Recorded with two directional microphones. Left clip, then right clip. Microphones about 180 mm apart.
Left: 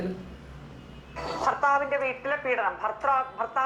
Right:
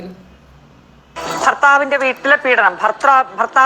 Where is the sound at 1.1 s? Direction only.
30° right (ahead or behind).